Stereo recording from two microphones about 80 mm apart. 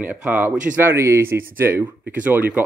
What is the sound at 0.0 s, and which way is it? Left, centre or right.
Speech, centre.